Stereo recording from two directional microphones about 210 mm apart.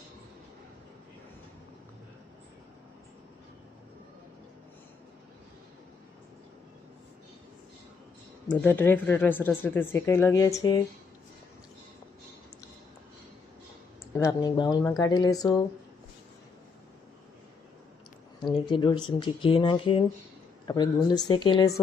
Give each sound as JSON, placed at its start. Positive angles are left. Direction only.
{"t": 8.4, "sound": "speech", "side_deg": 10}
{"t": 14.2, "sound": "speech", "side_deg": 15}
{"t": 18.6, "sound": "speech", "side_deg": 20}